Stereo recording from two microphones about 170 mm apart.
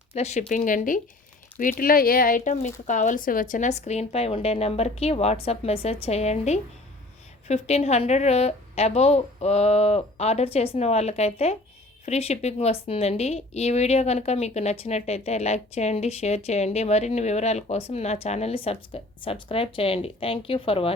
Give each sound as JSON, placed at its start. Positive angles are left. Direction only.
{"t": 0.1, "sound": "a woman's voice", "side_deg": 40}